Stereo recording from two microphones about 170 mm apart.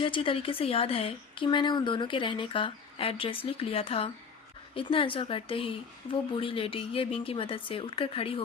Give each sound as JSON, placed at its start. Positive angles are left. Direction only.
{"t": 0.0, "sound": "speech", "side_deg": 30}